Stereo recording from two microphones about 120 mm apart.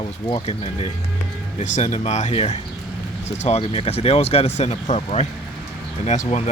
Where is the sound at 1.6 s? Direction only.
85° left.